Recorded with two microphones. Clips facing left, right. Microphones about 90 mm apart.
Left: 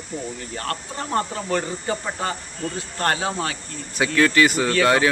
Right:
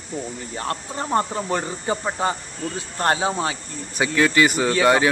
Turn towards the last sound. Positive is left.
turn(degrees=-15)  # may be behind; listen again after turning